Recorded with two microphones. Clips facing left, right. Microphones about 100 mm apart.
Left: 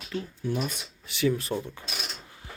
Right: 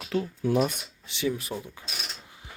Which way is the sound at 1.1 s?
20° right (ahead or behind).